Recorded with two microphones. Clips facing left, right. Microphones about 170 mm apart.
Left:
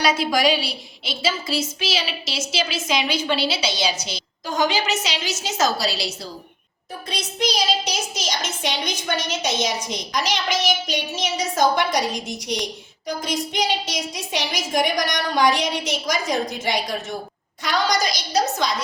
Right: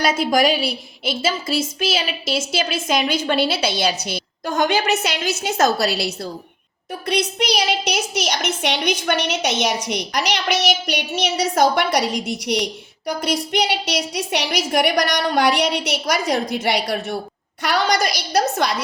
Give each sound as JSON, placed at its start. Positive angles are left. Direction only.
{"t": 0.3, "sound": "a woman's voice", "side_deg": -50}
{"t": 7.1, "sound": "a woman's voice", "side_deg": -65}
{"t": 13.1, "sound": "a woman's voice", "side_deg": -65}